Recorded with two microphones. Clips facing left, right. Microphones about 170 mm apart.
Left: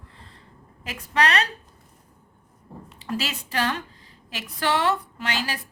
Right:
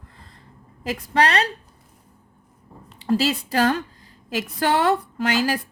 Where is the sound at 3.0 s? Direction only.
35° right (ahead or behind).